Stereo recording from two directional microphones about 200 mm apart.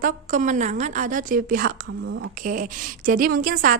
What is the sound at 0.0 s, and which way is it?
A woman's voice, 40° right (ahead or behind).